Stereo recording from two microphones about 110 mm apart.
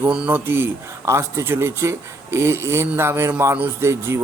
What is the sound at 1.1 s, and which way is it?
Speech, 25° right (ahead or behind).